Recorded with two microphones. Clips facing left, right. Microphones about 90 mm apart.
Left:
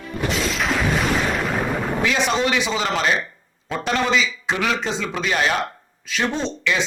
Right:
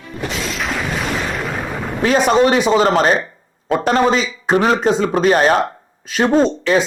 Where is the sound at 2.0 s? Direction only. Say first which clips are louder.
Right 9 dB; 45° right (ahead or behind).